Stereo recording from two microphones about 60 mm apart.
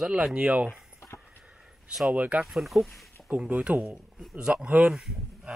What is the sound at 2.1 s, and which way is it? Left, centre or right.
Speech, right.